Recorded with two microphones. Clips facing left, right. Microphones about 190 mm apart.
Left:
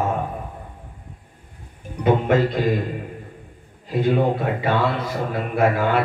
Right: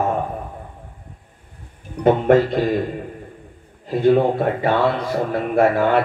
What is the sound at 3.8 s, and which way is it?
A man's voice, 45° right (ahead or behind).